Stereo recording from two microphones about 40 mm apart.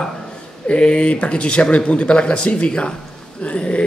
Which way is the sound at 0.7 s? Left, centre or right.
Left.